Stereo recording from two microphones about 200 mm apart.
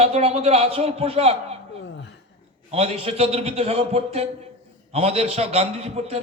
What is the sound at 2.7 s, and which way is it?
A man's voice, 30° right (ahead or behind).